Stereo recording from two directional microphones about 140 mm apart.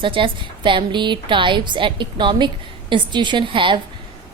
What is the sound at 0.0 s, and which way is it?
Speech, 35° right (ahead or behind).